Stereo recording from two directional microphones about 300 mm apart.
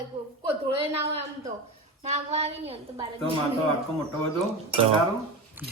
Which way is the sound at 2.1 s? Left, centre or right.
Right.